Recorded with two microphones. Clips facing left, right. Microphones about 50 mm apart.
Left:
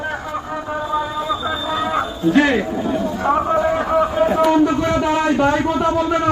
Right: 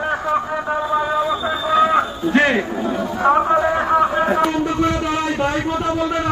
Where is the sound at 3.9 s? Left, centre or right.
Right.